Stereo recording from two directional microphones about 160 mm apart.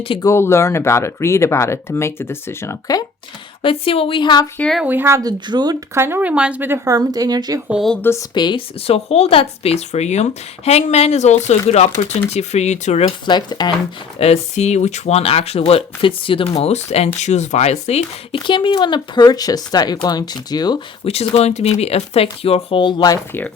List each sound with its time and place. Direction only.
0.0 s speech: 35° left (ahead or behind)
0.3 s speech: 15° left (ahead or behind)
3.6 s speech: 35° left (ahead or behind)
4.5 s speech: 5° left (ahead or behind)
4.8 s speech: 10° right (ahead or behind)
7.7 s a woman's voice: centre (ahead or behind)
8.3 s speech: 30° left (ahead or behind); by 13.1 s 45° left (ahead or behind)
13.2 s speech: 25° left (ahead or behind)
14.2 s speech: 40° left (ahead or behind); by 20.7 s 25° left (ahead or behind)
21.0 s speech: 40° left (ahead or behind); by 23.2 s 25° left (ahead or behind)